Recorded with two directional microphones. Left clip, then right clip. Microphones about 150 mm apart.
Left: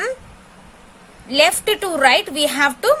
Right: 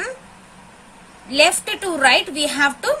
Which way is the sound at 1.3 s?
40° left (ahead or behind).